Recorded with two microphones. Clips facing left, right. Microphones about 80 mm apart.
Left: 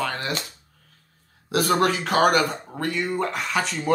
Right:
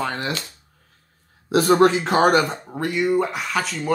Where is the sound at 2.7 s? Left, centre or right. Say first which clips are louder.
Right 5 dB; centre.